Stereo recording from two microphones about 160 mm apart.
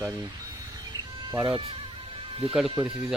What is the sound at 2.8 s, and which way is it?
Speech, 5° right (ahead or behind).